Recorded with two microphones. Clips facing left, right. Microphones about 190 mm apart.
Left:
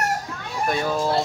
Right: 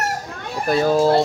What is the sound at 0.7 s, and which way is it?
Speech, 35° right (ahead or behind).